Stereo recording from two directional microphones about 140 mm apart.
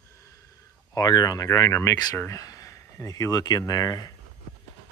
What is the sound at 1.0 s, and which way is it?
Speech, 30° left (ahead or behind).